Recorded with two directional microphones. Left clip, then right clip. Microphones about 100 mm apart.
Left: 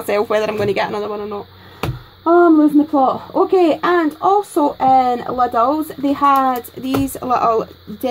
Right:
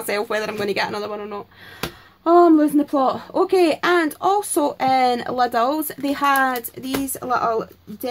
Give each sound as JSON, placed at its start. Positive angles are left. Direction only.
{"t": 0.0, "sound": "speech", "side_deg": 35}
{"t": 1.2, "sound": "a sound", "side_deg": 5}
{"t": 2.2, "sound": "speech", "side_deg": -15}
{"t": 3.1, "sound": "speech", "side_deg": 0}
{"t": 3.4, "sound": "speech", "side_deg": 15}
{"t": 4.2, "sound": "speech", "side_deg": -5}
{"t": 6.0, "sound": "speech", "side_deg": 10}
{"t": 6.9, "sound": "speech", "side_deg": 30}